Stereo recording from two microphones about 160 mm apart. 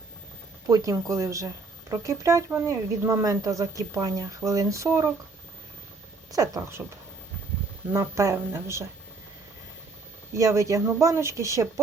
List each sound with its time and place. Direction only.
0.7 s speech: 20° right (ahead or behind)
6.3 s speech: 20° right (ahead or behind)
7.9 s speech: 20° right (ahead or behind)
10.3 s speech: 20° right (ahead or behind)